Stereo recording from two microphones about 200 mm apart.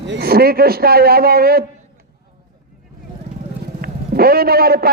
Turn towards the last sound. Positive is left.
turn(degrees=-50)  # may be behind; listen again after turning